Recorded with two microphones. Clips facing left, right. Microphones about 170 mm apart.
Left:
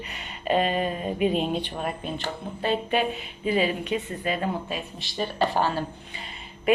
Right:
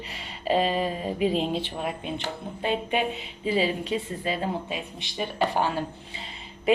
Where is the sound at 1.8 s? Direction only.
15° right (ahead or behind).